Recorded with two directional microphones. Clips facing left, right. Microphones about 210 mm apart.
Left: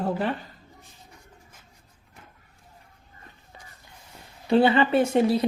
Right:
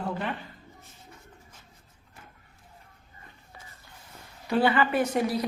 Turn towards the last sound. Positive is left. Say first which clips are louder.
# left 5 dB
turn(degrees=25)  # may be behind; listen again after turning